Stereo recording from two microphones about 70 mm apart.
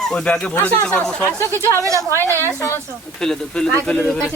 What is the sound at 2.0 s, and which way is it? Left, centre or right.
Speech, left.